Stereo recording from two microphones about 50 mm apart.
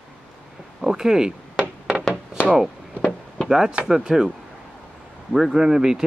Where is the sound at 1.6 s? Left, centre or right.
Right.